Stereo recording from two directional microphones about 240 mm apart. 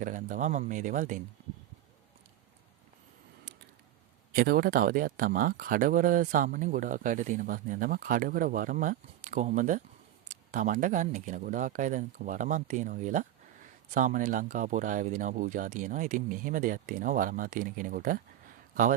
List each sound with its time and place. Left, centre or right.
0.0 s speech: right
4.4 s speech: right